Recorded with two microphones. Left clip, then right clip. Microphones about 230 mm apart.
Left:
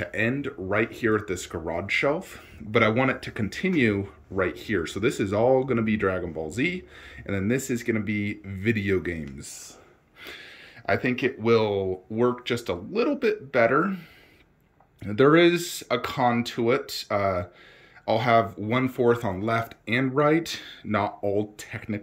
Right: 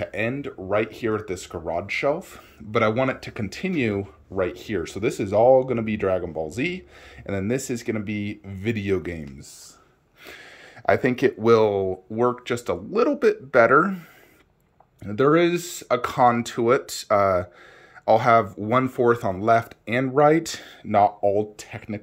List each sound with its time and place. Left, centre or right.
0.0 s speech: centre
10.9 s speech: right
15.0 s speech: centre